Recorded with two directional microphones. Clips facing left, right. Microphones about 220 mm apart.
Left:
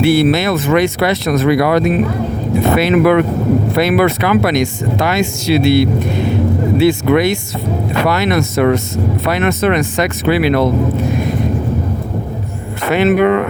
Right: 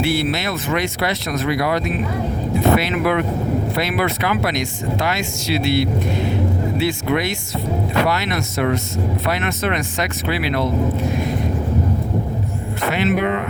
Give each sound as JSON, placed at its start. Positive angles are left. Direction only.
{"t": 0.0, "sound": "speech", "side_deg": 60}
{"t": 12.9, "sound": "speech", "side_deg": 55}